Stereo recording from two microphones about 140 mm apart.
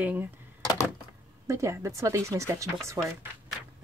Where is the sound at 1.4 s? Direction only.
20° right (ahead or behind).